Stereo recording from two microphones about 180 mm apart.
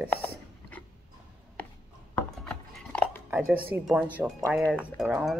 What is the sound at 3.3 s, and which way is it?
Speech, 10° right (ahead or behind).